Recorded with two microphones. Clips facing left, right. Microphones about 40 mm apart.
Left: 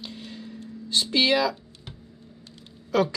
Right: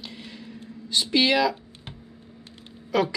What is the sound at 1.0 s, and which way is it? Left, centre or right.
Speech, centre.